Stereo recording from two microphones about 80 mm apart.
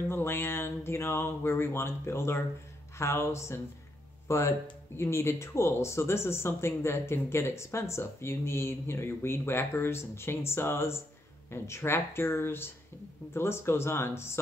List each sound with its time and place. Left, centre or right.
0.1 s speech: left